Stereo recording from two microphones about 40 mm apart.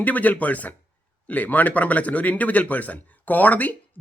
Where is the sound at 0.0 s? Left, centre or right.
Left.